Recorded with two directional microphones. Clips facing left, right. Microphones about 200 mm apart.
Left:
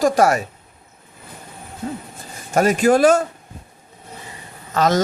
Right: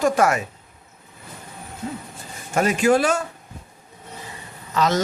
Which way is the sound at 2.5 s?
40° left (ahead or behind).